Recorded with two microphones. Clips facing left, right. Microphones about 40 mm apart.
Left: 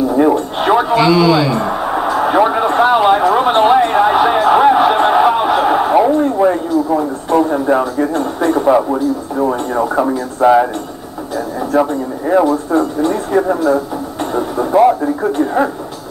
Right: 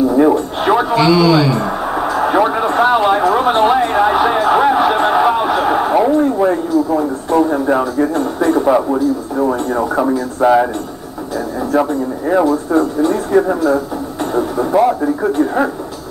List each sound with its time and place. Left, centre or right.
0.1 s a sound: centre
11.7 s speech: centre
14.3 s radio: centre
15.3 s speech: centre